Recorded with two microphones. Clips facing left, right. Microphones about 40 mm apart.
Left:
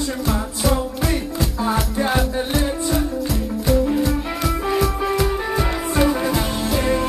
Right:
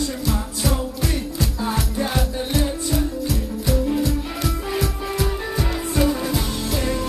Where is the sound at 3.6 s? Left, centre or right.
Centre.